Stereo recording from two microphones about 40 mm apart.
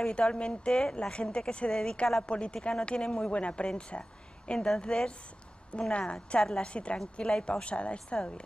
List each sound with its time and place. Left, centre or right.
0.0 s speech: left